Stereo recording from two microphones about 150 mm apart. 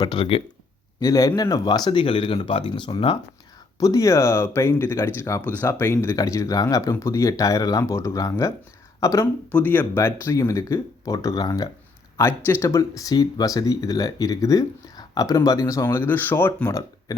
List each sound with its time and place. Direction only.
0.0 s speech: 35° left (ahead or behind)
0.9 s a man's voice: 20° left (ahead or behind)
3.8 s speech: 20° left (ahead or behind)
9.5 s speech: 10° left (ahead or behind)